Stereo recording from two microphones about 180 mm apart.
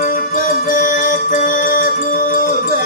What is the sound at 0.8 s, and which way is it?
Music, 45° left (ahead or behind).